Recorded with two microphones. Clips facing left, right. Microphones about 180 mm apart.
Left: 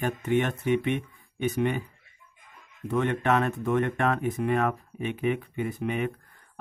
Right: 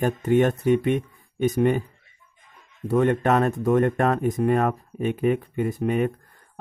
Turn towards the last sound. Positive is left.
turn(degrees=-40)  # may be behind; listen again after turning